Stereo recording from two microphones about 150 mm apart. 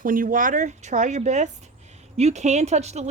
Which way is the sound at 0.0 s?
65° right (ahead or behind).